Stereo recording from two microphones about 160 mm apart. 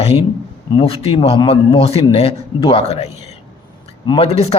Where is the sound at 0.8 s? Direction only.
35° left (ahead or behind).